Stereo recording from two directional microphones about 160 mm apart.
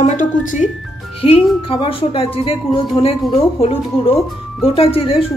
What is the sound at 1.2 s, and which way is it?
A woman's voice, 35° left (ahead or behind).